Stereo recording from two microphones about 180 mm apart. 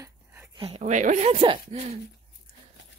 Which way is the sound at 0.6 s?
35° right (ahead or behind).